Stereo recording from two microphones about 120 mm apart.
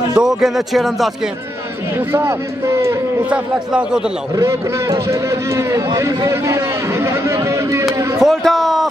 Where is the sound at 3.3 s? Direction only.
10° right (ahead or behind).